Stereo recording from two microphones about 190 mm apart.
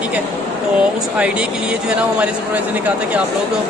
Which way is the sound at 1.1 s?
5° right (ahead or behind).